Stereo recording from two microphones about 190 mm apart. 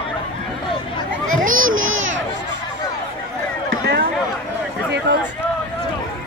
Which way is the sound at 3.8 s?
55° right (ahead or behind).